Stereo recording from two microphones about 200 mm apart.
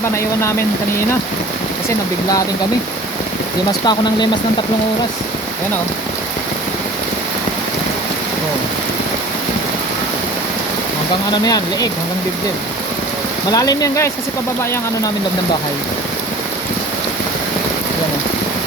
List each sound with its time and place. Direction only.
3.8 s speech: 20° left (ahead or behind)
11.3 s speech: 20° left (ahead or behind)
13.5 s speech: 20° left (ahead or behind)